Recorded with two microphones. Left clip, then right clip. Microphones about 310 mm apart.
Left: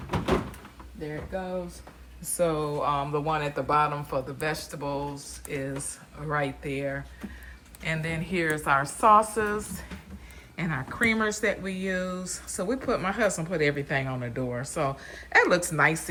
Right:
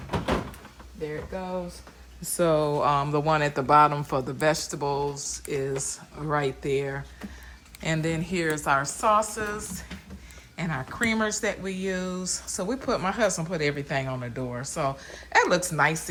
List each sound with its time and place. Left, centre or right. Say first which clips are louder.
2.4 s speech: right 4 dB; right; by 16.0 s centre